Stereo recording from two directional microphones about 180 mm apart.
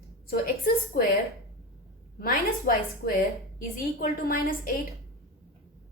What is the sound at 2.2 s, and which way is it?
A woman's voice, 55° left (ahead or behind).